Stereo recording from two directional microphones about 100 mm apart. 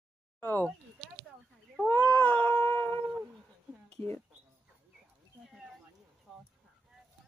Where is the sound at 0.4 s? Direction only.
20° left (ahead or behind).